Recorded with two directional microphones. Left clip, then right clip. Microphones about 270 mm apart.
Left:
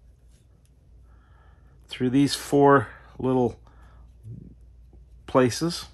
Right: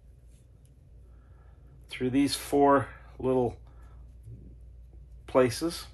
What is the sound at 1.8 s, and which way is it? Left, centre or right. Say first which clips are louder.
Speech: left 4 dB; left.